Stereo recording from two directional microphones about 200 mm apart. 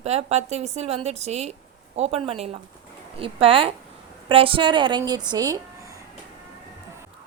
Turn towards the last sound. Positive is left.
turn(degrees=-15)  # may be behind; listen again after turning